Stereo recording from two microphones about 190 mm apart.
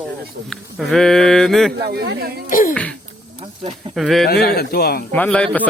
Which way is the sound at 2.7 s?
5° left (ahead or behind).